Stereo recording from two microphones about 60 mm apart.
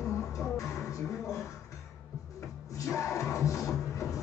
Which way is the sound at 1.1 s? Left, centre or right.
Left.